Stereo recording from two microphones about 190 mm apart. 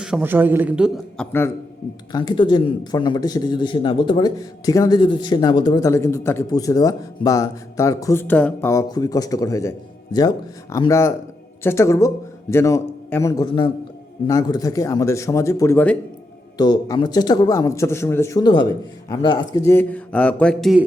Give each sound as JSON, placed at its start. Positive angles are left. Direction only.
{"t": 0.0, "sound": "a man's voice", "side_deg": -5}
{"t": 1.1, "sound": "speech", "side_deg": 10}
{"t": 2.1, "sound": "a man's voice", "side_deg": 25}
{"t": 16.6, "sound": "speech", "side_deg": 20}